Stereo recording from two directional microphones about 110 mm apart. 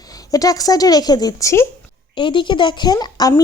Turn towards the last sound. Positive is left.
turn(degrees=35)  # may be behind; listen again after turning